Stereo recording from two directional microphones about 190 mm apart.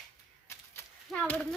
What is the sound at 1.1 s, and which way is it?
Speech, 5° left (ahead or behind).